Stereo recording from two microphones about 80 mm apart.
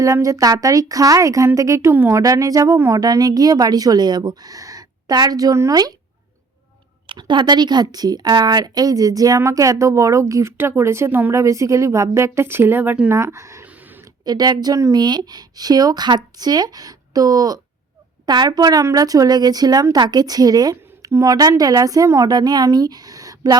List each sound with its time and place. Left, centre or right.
0.0 s a woman's voice: right
1.9 s a woman's voice: right
2.2 s speech: right
7.1 s a woman's voice: right
11.3 s a woman's voice: right
13.1 s speech: right
13.7 s a sound: right
14.3 s a woman's voice: right
22.3 s speech: right